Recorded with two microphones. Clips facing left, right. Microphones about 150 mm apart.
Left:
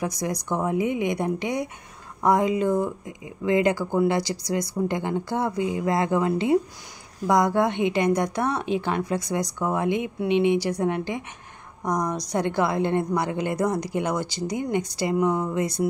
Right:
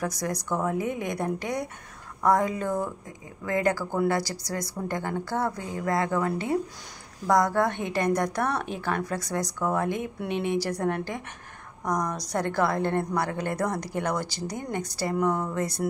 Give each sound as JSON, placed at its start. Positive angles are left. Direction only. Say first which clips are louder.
{"t": 0.0, "sound": "speech", "louder": "left 2 dB", "side_deg": 15}